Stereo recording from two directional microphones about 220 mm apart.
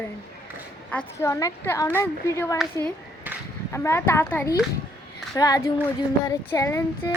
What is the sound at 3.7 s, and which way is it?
A child's voice, 10° left (ahead or behind).